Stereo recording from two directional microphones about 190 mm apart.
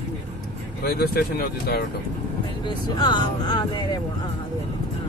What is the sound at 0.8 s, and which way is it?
Speech, 55° left (ahead or behind).